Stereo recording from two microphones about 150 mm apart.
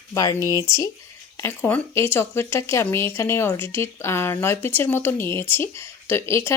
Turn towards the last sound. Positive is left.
turn(degrees=15)  # may be behind; listen again after turning